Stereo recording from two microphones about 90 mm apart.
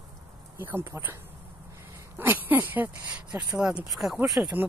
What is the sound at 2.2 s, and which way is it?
Speech, 20° right (ahead or behind).